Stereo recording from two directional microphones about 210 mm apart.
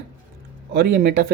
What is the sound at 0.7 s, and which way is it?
Speech, 50° right (ahead or behind).